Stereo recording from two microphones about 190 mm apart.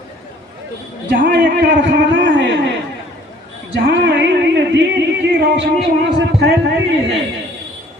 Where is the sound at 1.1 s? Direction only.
65° right (ahead or behind).